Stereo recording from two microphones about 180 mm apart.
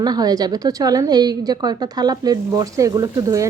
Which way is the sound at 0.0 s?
20° right (ahead or behind).